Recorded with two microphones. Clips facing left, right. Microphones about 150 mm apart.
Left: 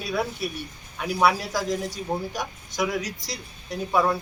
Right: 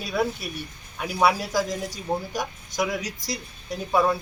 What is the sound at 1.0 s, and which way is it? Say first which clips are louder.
Speech: even; 15° right (ahead or behind).